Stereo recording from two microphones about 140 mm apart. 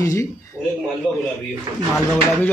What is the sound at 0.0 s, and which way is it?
Speech, 25° left (ahead or behind).